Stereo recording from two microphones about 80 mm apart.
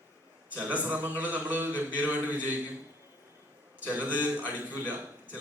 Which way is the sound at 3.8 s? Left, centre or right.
Centre.